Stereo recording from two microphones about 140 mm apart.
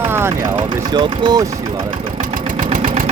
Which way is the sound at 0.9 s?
35° right (ahead or behind).